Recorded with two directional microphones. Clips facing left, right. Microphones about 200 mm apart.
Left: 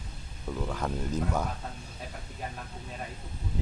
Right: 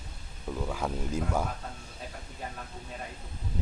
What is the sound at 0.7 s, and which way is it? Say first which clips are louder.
Speech: even; 5° right (ahead or behind).